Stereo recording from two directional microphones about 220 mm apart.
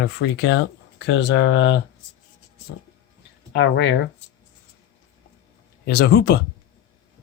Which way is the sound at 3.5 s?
55° left (ahead or behind).